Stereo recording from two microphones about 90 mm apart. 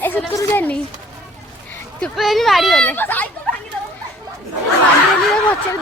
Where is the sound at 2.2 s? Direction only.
Centre (ahead or behind).